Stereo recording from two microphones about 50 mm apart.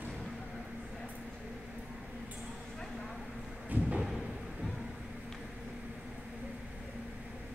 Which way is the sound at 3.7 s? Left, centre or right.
Right.